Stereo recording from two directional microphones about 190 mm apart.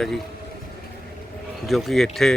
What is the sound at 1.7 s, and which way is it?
Speech, centre (ahead or behind).